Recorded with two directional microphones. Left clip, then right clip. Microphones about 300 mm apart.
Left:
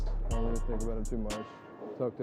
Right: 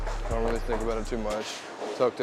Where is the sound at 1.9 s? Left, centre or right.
Centre.